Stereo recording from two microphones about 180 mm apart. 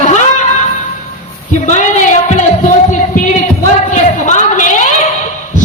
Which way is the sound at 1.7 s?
45° left (ahead or behind).